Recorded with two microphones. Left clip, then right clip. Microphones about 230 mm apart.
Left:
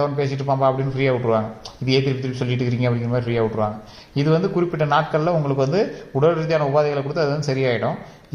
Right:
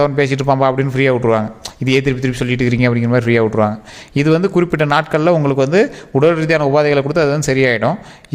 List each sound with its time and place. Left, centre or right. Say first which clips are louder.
0.0 s speech: right 8 dB; right